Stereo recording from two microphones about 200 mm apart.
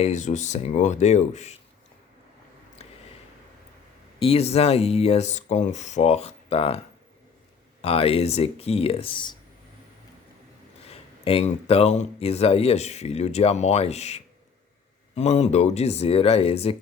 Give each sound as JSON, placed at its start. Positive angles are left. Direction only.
{"t": 0.0, "sound": "speech", "side_deg": 35}
{"t": 4.2, "sound": "speech", "side_deg": 30}
{"t": 7.8, "sound": "speech", "side_deg": 30}
{"t": 10.8, "sound": "speech", "side_deg": 30}